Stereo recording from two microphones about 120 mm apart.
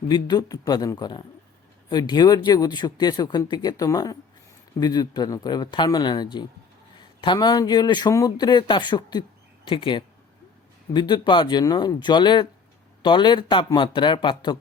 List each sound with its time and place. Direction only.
0.1 s speech: 35° left (ahead or behind)